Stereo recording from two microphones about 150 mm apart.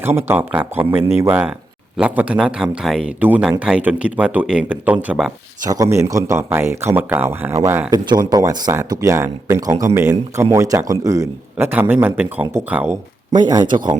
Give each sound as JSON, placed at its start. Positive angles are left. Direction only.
{"t": 0.0, "sound": "speech", "side_deg": -15}
{"t": 5.6, "sound": "speech", "side_deg": -20}
{"t": 13.3, "sound": "speech", "side_deg": -25}